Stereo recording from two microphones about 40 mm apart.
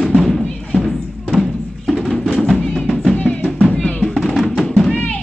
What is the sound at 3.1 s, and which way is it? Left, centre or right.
Music, left.